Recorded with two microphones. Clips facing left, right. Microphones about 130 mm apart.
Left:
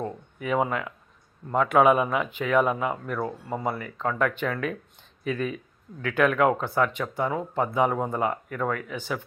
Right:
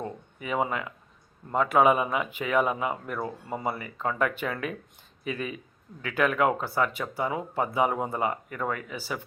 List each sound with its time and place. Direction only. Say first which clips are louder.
0.4 s speech: left 3 dB; centre (ahead or behind)